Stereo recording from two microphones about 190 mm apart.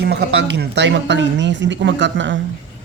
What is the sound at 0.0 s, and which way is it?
A woman's voice, 60° right (ahead or behind).